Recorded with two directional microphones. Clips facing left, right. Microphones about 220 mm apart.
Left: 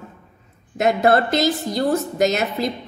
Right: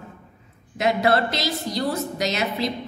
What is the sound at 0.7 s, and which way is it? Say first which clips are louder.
A woman's voice: left 4 dB; 50° left (ahead or behind).